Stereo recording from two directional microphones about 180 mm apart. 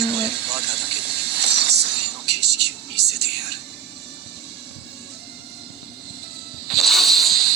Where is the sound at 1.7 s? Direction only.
70° right (ahead or behind).